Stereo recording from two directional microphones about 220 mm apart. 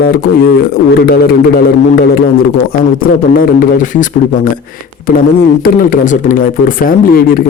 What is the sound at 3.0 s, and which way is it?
Speech, 40° left (ahead or behind).